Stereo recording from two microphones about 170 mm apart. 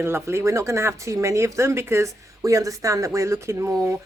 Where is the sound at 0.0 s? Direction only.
15° right (ahead or behind).